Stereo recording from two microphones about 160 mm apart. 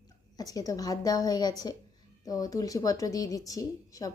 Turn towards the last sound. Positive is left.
turn(degrees=20)  # may be behind; listen again after turning